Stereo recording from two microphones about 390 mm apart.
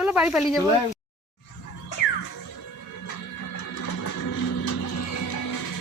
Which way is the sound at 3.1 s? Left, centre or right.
Left.